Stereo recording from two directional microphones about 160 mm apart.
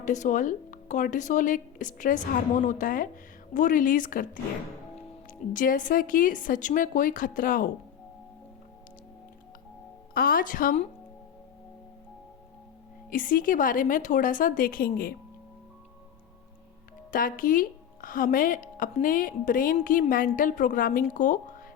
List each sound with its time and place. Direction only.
0.0 s a woman's voice: 50° left (ahead or behind)
5.5 s a woman's voice: 55° left (ahead or behind)
10.2 s a woman's voice: 65° left (ahead or behind)
13.1 s a woman's voice: 60° left (ahead or behind)
17.1 s a woman's voice: 60° left (ahead or behind)